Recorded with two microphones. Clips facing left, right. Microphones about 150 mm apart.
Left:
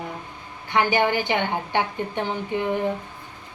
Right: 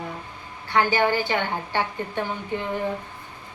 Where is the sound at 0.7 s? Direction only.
20° left (ahead or behind).